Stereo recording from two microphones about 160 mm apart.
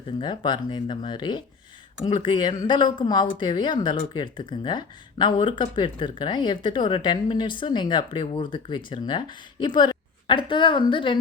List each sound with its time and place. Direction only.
0.2 s speech: 30° left (ahead or behind)